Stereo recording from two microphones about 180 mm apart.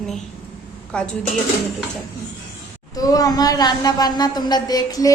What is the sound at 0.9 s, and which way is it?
Speech, 5° left (ahead or behind).